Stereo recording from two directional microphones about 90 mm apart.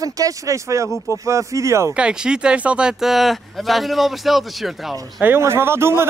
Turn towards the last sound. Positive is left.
turn(degrees=-30)  # may be behind; listen again after turning